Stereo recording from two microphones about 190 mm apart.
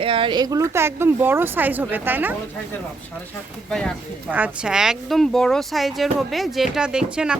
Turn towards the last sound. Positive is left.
turn(degrees=-5)  # may be behind; listen again after turning